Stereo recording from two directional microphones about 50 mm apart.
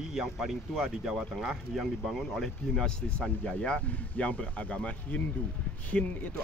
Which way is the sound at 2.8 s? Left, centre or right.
Centre.